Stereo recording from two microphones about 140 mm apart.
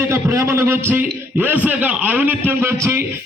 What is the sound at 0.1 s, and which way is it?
A man's voice, 20° right (ahead or behind).